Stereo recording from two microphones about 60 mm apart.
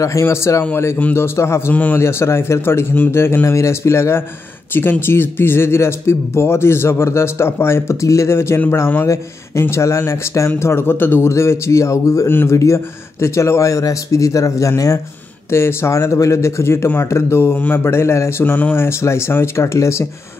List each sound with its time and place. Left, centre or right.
0.2 s speech: left
1.7 s a man's voice: left
2.0 s speech: left
3.4 s speech: left
5.0 s speech: left
10.6 s a man's voice: left
11.2 s speech: left
15.5 s speech: left
17.4 s a man's voice: left
18.4 s a man's voice: left
18.9 s speech: left